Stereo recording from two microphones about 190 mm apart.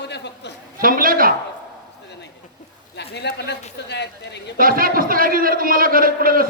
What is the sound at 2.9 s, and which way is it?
A woman's voice, 60° left (ahead or behind).